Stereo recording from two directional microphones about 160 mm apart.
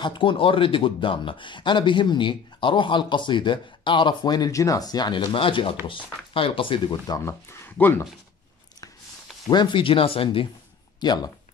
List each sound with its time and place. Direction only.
0.0 s speech: 30° left (ahead or behind)
7.6 s speech: 15° left (ahead or behind)
9.5 s speech: 30° left (ahead or behind)